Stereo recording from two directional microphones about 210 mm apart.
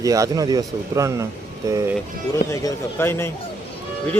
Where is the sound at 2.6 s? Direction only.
10° left (ahead or behind).